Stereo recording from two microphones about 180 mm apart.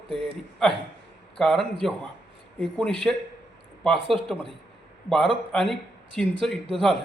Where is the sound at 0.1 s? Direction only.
Centre (ahead or behind).